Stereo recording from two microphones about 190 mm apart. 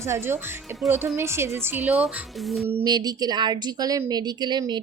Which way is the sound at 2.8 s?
20° right (ahead or behind).